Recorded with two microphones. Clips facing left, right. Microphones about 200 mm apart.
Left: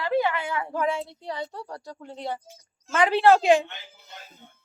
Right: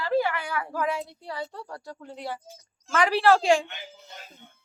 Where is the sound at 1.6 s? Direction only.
35° left (ahead or behind).